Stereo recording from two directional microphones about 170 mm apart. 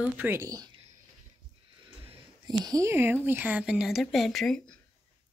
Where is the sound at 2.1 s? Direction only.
25° right (ahead or behind); by 4.8 s 5° left (ahead or behind).